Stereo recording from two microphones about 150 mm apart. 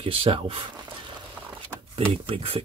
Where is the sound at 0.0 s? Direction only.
40° right (ahead or behind).